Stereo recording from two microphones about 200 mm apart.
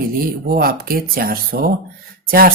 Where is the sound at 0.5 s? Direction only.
50° right (ahead or behind).